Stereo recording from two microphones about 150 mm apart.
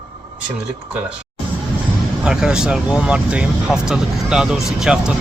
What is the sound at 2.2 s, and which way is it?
Speech, 5° right (ahead or behind).